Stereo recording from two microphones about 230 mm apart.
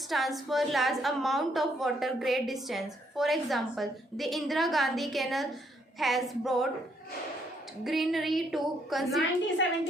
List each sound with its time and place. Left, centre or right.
0.1 s a woman's voice: centre
7.9 s a woman's voice: centre